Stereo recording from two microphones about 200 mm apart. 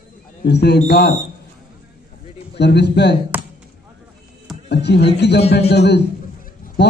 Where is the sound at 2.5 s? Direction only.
55° left (ahead or behind).